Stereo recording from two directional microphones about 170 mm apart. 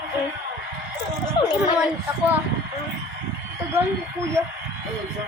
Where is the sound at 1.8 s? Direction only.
10° right (ahead or behind).